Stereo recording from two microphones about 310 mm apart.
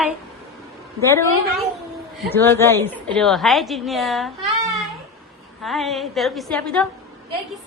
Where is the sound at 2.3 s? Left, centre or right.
Centre.